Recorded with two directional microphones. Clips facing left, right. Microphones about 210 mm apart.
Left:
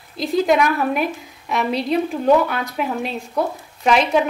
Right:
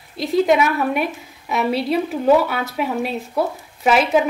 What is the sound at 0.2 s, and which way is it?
A woman's voice, centre (ahead or behind).